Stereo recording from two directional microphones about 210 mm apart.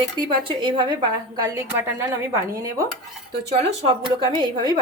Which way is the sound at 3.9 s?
20° right (ahead or behind).